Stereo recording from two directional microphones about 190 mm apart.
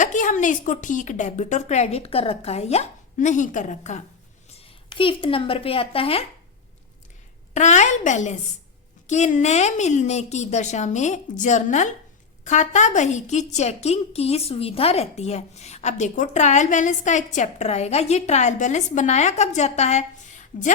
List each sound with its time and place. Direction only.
0.0 s a woman's voice: 40° left (ahead or behind)
4.5 s speech: 25° left (ahead or behind)
7.5 s a woman's voice: 40° left (ahead or behind)